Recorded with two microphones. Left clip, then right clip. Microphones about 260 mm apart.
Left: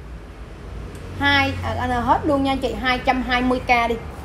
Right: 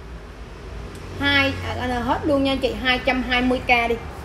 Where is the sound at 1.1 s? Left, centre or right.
Centre.